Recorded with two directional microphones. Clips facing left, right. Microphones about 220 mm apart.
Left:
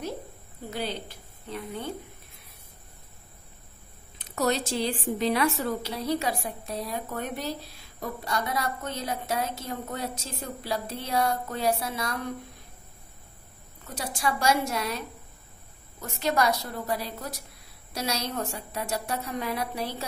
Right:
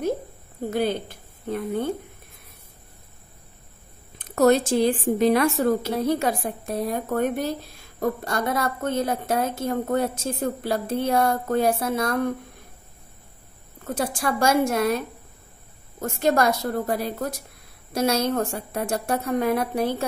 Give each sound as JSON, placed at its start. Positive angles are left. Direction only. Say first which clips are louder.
{"t": 0.7, "sound": "a woman's voice", "louder": "right 9 dB", "side_deg": -50}
{"t": 4.2, "sound": "a woman's voice", "louder": "right 9 dB", "side_deg": -50}
{"t": 13.8, "sound": "a woman's voice", "louder": "right 5 dB", "side_deg": -50}